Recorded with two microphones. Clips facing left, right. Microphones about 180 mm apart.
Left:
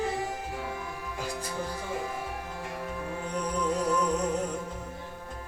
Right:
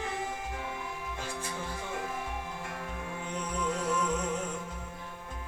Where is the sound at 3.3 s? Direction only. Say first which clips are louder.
Left 4 dB; 40° left (ahead or behind).